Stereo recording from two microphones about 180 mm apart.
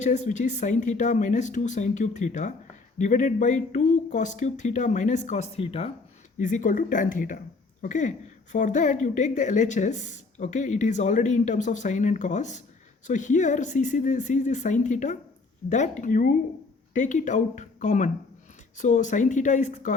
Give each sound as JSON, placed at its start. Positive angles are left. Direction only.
{"t": 0.0, "sound": "speech", "side_deg": 40}
{"t": 6.4, "sound": "speech", "side_deg": 45}